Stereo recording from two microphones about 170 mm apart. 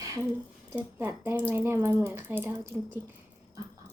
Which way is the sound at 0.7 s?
10° right (ahead or behind).